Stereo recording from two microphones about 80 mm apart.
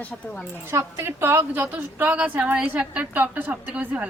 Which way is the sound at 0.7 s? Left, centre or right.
Right.